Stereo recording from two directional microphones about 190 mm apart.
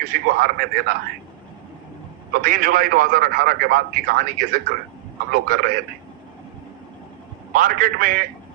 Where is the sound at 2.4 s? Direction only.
45° right (ahead or behind).